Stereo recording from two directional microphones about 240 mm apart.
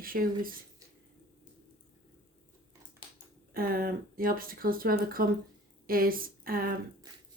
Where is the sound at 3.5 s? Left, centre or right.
Right.